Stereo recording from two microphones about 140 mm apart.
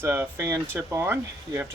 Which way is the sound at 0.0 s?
15° right (ahead or behind).